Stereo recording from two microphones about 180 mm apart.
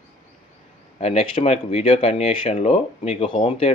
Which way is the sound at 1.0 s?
35° left (ahead or behind).